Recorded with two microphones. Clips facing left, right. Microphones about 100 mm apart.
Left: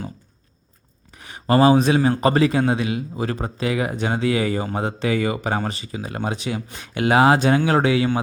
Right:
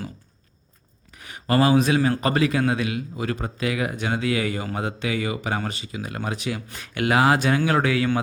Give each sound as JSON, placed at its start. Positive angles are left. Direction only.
{"t": 1.1, "sound": "a man's voice", "side_deg": 30}